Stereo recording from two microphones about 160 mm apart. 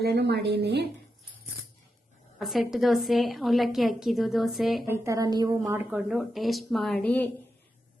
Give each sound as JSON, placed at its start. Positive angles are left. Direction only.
{"t": 0.0, "sound": "a woman's voice", "side_deg": -90}
{"t": 2.4, "sound": "a woman's voice", "side_deg": 0}
{"t": 4.9, "sound": "a woman's voice", "side_deg": -20}
{"t": 5.9, "sound": "a woman's voice", "side_deg": -5}